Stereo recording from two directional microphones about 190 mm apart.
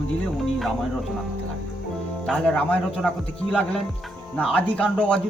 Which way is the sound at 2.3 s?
5° left (ahead or behind).